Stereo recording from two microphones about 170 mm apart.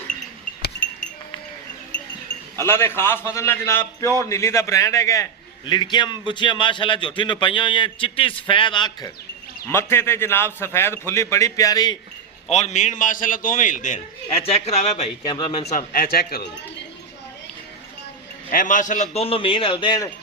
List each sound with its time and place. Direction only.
2.6 s a man's voice: 15° left (ahead or behind)
9.6 s a man's voice: 15° left (ahead or behind)
12.5 s a man's voice: 40° left (ahead or behind)
15.2 s a man's voice: 25° left (ahead or behind)
15.9 s speech: 60° left (ahead or behind)
18.5 s a man's voice: 50° left (ahead or behind); by 20.1 s 25° left (ahead or behind)